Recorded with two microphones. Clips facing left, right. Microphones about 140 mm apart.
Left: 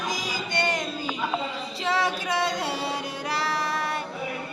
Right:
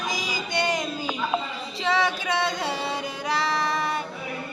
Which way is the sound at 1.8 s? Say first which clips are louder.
Right 2 dB; 5° left (ahead or behind).